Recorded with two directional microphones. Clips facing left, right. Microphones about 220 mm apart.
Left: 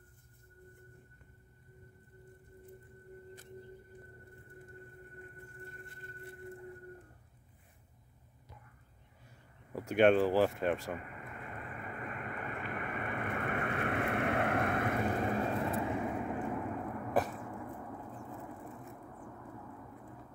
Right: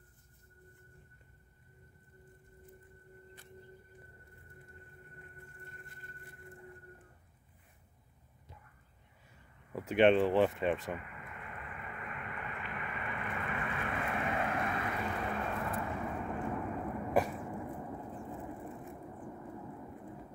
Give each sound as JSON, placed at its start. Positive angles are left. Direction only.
{"t": 9.8, "sound": "speech", "side_deg": 0}
{"t": 11.0, "sound": "vehicle", "side_deg": 40}
{"t": 15.7, "sound": "vehicle", "side_deg": 15}
{"t": 16.8, "sound": "a sound", "side_deg": -10}